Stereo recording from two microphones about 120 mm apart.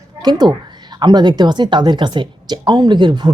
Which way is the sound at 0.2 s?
35° right (ahead or behind).